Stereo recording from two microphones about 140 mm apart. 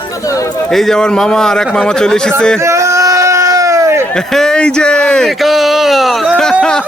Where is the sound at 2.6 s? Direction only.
20° right (ahead or behind).